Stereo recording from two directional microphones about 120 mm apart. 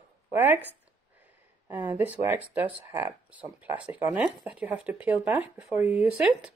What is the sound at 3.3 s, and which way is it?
Speech, 15° right (ahead or behind).